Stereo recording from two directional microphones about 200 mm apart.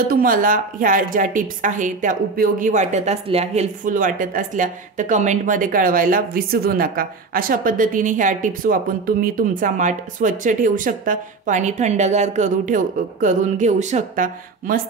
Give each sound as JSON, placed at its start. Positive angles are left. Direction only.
{"t": 0.1, "sound": "a woman's voice", "side_deg": -45}